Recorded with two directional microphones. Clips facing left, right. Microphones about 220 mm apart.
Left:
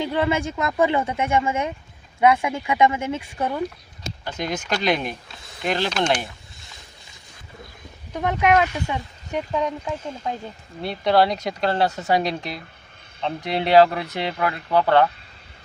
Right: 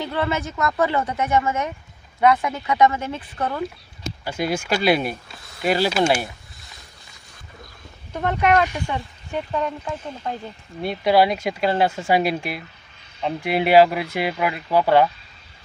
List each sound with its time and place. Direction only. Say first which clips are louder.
0.0 s speech: left 2 dB; 15° left (ahead or behind)
4.2 s speech: right 4 dB; 10° right (ahead or behind)
8.1 s speech: even; 15° left (ahead or behind)
10.8 s speech: right 1 dB; 10° right (ahead or behind)